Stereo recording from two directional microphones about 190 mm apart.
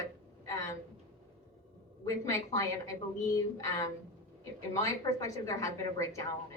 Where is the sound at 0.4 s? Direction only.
15° left (ahead or behind).